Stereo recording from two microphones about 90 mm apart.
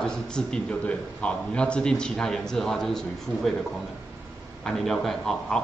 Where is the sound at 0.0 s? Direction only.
10° left (ahead or behind).